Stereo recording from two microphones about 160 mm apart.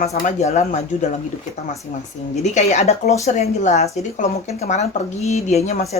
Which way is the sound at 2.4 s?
45° left (ahead or behind).